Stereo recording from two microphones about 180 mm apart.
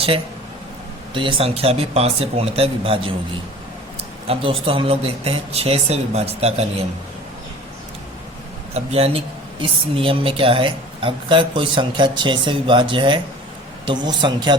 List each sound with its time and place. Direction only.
1.1 s speech: 30° right (ahead or behind)
8.7 s speech: 35° right (ahead or behind)